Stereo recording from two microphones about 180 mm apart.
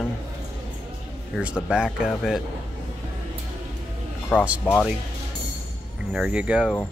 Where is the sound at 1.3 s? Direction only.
5° right (ahead or behind).